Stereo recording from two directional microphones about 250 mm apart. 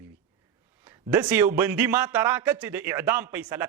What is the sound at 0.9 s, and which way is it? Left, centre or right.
A man's voice, centre.